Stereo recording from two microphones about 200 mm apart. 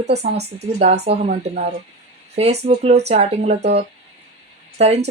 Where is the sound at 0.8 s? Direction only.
35° right (ahead or behind).